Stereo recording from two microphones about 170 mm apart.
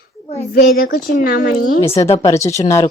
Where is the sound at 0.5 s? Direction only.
60° left (ahead or behind).